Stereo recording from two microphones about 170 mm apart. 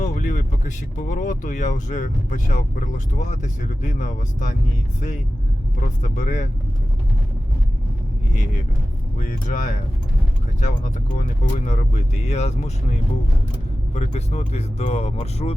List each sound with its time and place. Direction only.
0.0 s speech: 45° left (ahead or behind)
6.0 s speech: 45° left (ahead or behind)
9.1 s speech: 50° left (ahead or behind)